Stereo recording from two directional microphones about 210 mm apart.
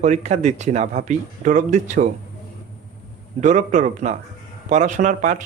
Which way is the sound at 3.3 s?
35° right (ahead or behind).